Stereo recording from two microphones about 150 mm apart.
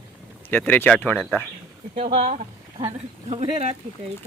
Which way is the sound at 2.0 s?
40° right (ahead or behind).